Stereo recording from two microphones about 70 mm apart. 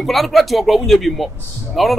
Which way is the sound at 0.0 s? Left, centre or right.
Centre.